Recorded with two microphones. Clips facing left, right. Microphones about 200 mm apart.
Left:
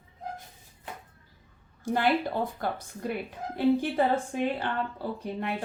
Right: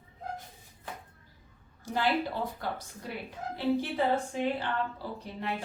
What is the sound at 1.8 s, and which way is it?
A woman's voice, 55° left (ahead or behind).